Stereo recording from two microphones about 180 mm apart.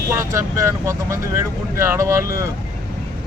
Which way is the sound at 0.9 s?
15° right (ahead or behind).